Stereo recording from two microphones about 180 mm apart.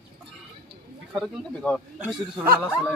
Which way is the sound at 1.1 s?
Centre (ahead or behind).